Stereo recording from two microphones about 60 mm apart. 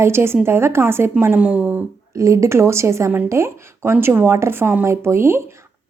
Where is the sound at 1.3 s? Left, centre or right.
Centre.